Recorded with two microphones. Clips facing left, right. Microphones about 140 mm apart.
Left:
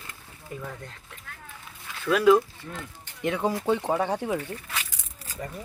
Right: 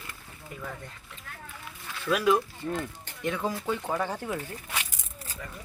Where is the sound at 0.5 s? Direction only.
25° left (ahead or behind).